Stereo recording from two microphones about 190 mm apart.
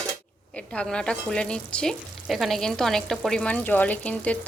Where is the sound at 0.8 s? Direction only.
5° left (ahead or behind).